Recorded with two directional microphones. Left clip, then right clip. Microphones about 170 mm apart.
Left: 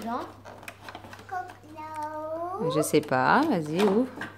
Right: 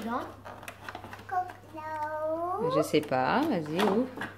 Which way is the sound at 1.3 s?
Centre (ahead or behind).